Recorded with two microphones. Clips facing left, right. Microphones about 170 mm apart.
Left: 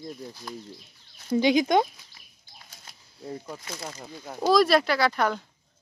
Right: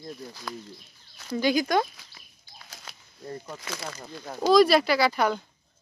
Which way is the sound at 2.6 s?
90° right.